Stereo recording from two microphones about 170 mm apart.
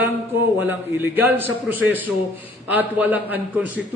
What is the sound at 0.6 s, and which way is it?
A man's voice, 10° right (ahead or behind).